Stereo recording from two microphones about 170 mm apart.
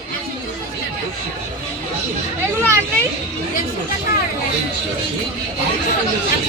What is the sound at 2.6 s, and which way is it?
Speech, 15° right (ahead or behind).